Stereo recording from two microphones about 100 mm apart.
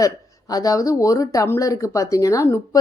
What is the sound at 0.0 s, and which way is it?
A woman's voice, 35° left (ahead or behind).